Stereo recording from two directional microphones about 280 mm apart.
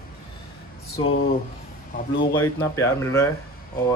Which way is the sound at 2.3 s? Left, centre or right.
Centre.